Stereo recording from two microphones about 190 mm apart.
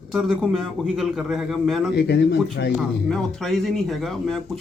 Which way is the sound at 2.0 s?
60° left (ahead or behind).